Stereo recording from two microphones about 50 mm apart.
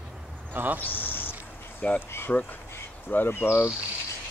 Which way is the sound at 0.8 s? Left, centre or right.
Left.